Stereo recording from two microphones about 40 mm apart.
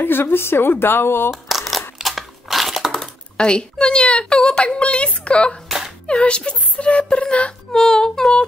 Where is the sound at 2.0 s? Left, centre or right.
Centre.